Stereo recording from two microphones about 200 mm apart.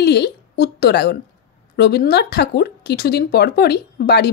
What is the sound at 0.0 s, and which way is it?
A woman's voice, 55° left (ahead or behind).